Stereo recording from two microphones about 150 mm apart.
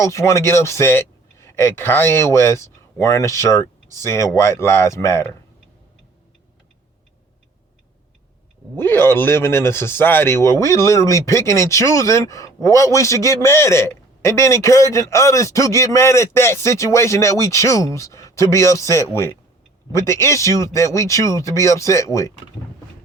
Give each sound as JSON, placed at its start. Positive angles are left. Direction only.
{"t": 0.0, "sound": "speech", "side_deg": 20}
{"t": 8.7, "sound": "speech", "side_deg": 15}